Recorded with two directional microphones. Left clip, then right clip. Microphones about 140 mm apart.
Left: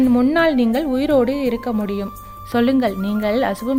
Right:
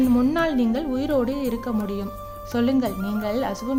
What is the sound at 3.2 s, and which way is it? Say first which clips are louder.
Speech: left 7 dB; 35° left (ahead or behind).